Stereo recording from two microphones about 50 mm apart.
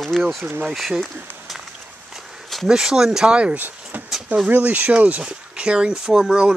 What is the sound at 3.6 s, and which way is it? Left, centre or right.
Vehicle, right.